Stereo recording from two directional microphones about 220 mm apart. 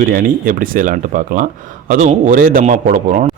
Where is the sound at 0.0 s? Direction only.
40° right (ahead or behind).